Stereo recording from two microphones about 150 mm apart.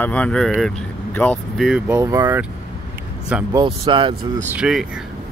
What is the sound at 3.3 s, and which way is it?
Speech, 10° right (ahead or behind).